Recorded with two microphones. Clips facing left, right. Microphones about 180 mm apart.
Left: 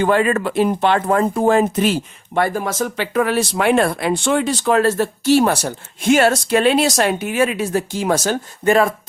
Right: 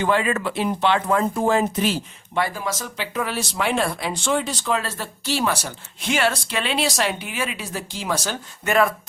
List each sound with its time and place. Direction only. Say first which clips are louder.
0.0 s speech: left 5 dB; 50° left (ahead or behind)
8.6 s speech: left 5 dB; 30° left (ahead or behind)